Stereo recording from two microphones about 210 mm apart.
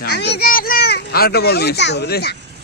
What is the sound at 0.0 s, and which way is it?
A child's voice, 50° left (ahead or behind).